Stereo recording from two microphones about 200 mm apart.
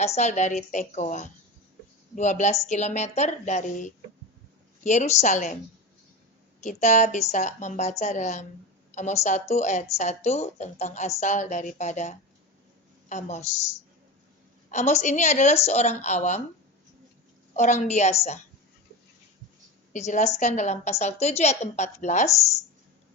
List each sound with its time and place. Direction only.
0.0 s a woman's voice: 35° left (ahead or behind)
6.6 s a woman's voice: 35° left (ahead or behind)
14.7 s a woman's voice: 35° left (ahead or behind)
17.5 s a woman's voice: 35° left (ahead or behind)
19.9 s a woman's voice: 35° left (ahead or behind)